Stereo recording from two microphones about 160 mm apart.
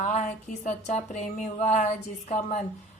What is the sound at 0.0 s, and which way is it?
A woman's voice, 50° left (ahead or behind).